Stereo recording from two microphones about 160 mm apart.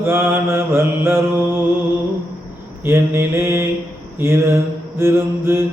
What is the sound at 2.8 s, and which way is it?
Mantra, 15° right (ahead or behind).